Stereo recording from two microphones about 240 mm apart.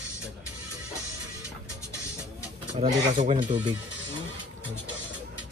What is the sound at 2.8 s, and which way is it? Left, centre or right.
Speech, right.